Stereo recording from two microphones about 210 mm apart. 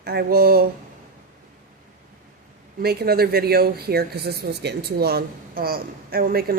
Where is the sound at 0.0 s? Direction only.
50° right (ahead or behind).